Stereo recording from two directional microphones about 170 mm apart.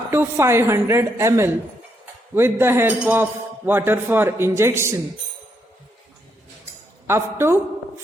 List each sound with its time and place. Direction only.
0.1 s a woman's voice: 15° right (ahead or behind)
7.1 s a woman's voice: 15° right (ahead or behind)